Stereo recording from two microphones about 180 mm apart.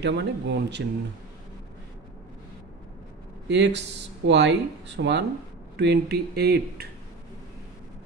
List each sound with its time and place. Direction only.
0.0 s speech: 70° right (ahead or behind)
3.4 s speech: 75° right (ahead or behind)